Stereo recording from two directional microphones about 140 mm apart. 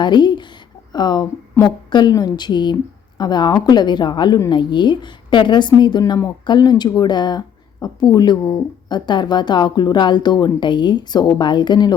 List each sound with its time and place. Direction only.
0.0 s a woman's voice: 30° left (ahead or behind)